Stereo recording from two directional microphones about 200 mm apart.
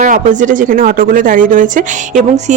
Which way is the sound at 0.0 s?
40° right (ahead or behind).